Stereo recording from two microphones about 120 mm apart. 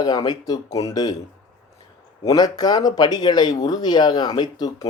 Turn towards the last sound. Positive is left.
turn(degrees=35)  # may be behind; listen again after turning